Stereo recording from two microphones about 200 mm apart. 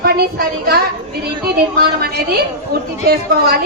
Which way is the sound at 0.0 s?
50° right (ahead or behind).